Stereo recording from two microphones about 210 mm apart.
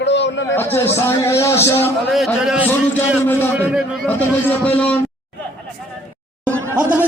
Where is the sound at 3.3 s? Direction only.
10° left (ahead or behind).